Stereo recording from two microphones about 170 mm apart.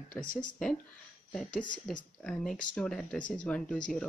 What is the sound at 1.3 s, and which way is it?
Speech, centre (ahead or behind).